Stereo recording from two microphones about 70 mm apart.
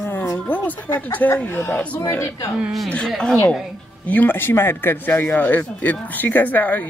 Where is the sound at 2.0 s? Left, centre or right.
Left.